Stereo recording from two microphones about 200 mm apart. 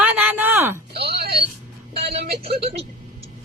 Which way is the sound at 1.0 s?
55° right (ahead or behind).